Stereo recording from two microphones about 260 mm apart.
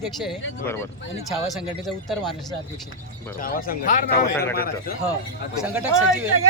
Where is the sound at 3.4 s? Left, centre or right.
Left.